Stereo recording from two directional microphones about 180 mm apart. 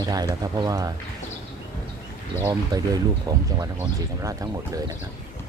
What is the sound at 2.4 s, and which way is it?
Speech, 20° right (ahead or behind).